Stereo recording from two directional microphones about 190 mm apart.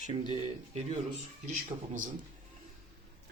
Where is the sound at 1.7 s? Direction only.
25° right (ahead or behind).